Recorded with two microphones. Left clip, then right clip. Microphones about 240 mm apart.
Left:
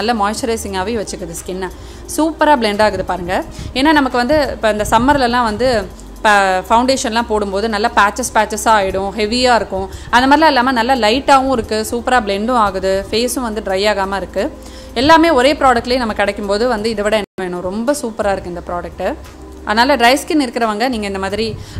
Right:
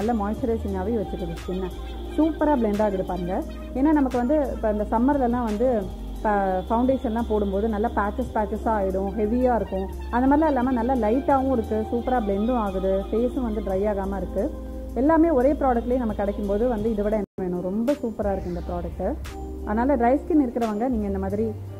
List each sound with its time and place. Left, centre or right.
0.0 s a woman's voice: centre
2.1 s a woman's voice: centre